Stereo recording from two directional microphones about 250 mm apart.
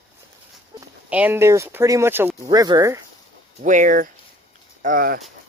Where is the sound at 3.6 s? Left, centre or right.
Right.